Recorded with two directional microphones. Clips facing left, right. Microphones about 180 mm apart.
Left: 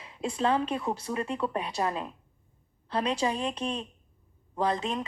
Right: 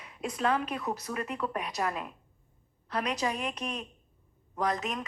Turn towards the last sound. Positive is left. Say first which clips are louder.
# left 3 dB
turn(degrees=30)  # may be behind; listen again after turning